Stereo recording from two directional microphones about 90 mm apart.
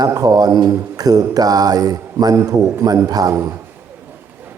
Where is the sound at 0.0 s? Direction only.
45° right (ahead or behind).